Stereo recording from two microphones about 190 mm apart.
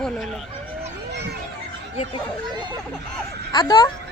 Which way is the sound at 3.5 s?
25° left (ahead or behind).